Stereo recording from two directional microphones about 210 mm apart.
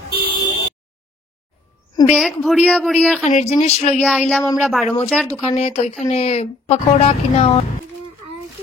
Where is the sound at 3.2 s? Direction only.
35° left (ahead or behind).